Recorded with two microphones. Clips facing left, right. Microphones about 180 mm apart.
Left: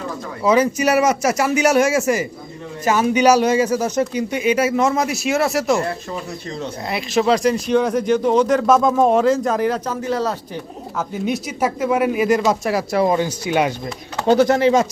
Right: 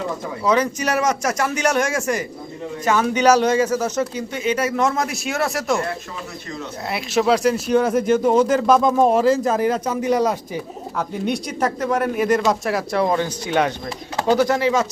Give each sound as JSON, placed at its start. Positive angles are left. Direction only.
{"t": 0.4, "sound": "speech", "side_deg": 5}
{"t": 6.8, "sound": "speech", "side_deg": -5}
{"t": 10.9, "sound": "speech", "side_deg": 5}
{"t": 14.3, "sound": "speech", "side_deg": 25}